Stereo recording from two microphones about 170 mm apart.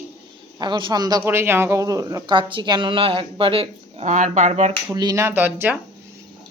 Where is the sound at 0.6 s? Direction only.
25° right (ahead or behind); by 4.7 s 45° right (ahead or behind).